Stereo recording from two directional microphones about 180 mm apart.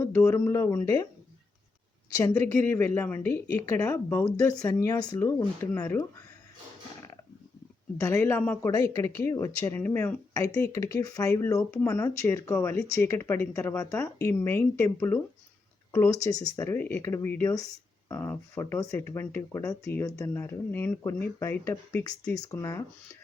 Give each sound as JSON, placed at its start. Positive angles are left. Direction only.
{"t": 0.0, "sound": "speech", "side_deg": 15}
{"t": 2.1, "sound": "speech", "side_deg": 15}
{"t": 7.9, "sound": "speech", "side_deg": 15}